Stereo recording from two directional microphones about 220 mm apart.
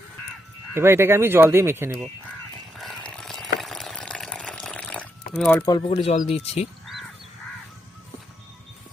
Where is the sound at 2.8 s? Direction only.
5° left (ahead or behind).